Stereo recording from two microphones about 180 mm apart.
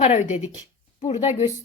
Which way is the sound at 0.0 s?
40° left (ahead or behind).